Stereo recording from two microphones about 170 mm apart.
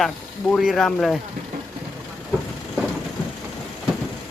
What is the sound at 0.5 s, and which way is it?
Speech, centre (ahead or behind).